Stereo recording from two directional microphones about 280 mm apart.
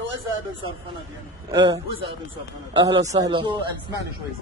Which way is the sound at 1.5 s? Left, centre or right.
Centre.